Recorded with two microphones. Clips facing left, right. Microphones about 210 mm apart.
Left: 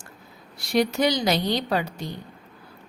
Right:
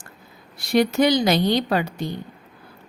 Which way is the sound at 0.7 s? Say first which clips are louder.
Right 4 dB; 55° right (ahead or behind).